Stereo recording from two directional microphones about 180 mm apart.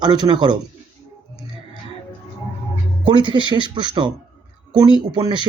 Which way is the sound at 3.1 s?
25° right (ahead or behind).